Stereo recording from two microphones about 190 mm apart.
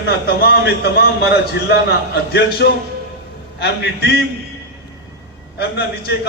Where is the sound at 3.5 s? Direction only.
65° left (ahead or behind).